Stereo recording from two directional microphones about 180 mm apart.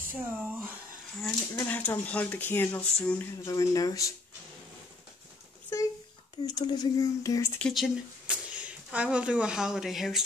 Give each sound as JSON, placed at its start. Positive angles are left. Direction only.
{"t": 0.1, "sound": "speech", "side_deg": -10}
{"t": 1.2, "sound": "speech", "side_deg": 10}
{"t": 3.4, "sound": "speech", "side_deg": 20}
{"t": 6.4, "sound": "speech", "side_deg": 20}
{"t": 7.5, "sound": "speech", "side_deg": 0}